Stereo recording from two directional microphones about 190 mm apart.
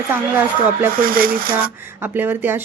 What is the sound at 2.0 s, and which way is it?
Speech, 10° right (ahead or behind).